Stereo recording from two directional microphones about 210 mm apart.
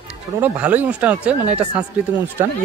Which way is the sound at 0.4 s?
5° right (ahead or behind).